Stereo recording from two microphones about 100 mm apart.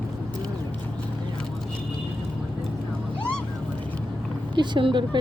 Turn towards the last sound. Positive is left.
turn(degrees=-55)  # may be behind; listen again after turning